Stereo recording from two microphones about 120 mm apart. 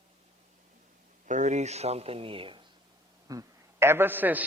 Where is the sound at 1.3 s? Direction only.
80° right; by 2.6 s 50° right (ahead or behind).